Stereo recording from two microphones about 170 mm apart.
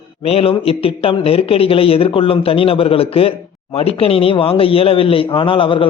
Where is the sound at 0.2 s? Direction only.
35° left (ahead or behind).